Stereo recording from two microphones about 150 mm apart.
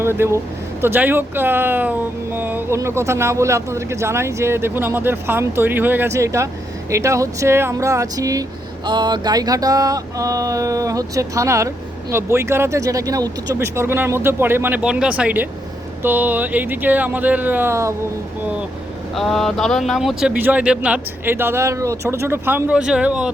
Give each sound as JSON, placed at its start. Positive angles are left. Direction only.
{"t": 0.0, "sound": "speech", "side_deg": -15}
{"t": 6.9, "sound": "a sound", "side_deg": -20}
{"t": 12.1, "sound": "speech", "side_deg": -15}
{"t": 19.1, "sound": "speech", "side_deg": 0}